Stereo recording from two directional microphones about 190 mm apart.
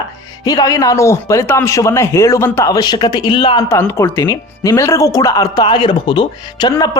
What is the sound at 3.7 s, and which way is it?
Speech, 15° left (ahead or behind).